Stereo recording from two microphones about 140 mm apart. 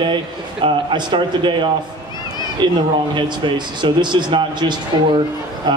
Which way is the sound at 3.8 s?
35° right (ahead or behind).